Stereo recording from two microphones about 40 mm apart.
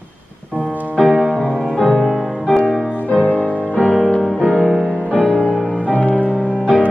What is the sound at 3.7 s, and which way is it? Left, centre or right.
Music, right.